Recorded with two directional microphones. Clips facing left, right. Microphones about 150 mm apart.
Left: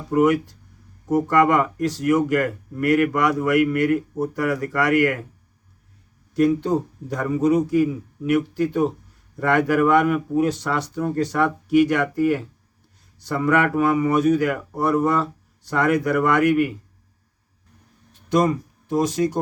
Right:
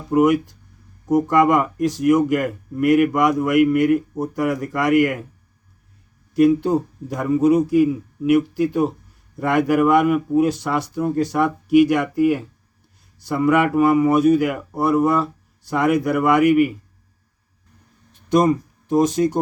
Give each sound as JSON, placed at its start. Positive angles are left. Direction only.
{"t": 0.1, "sound": "speech", "side_deg": -15}
{"t": 6.3, "sound": "speech", "side_deg": -10}
{"t": 18.3, "sound": "speech", "side_deg": -20}